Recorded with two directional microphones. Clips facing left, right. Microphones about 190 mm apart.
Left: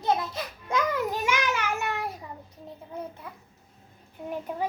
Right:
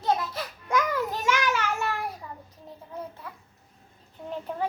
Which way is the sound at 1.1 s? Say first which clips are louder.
Right 1 dB; 15° left (ahead or behind).